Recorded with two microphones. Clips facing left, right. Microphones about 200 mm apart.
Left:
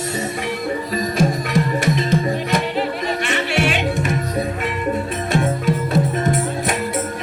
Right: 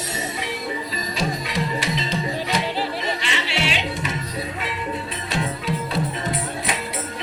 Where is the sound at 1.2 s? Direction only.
50° left (ahead or behind).